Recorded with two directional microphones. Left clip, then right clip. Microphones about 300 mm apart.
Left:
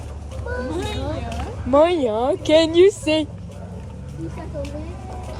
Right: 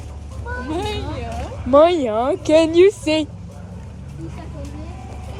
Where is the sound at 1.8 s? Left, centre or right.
Right.